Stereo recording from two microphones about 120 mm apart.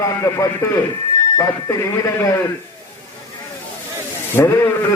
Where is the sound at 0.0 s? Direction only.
30° left (ahead or behind).